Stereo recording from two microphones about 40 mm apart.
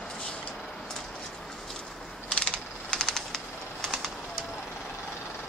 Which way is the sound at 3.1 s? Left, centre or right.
Centre.